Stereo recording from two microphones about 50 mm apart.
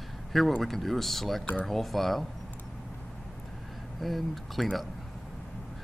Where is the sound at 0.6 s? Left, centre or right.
Centre.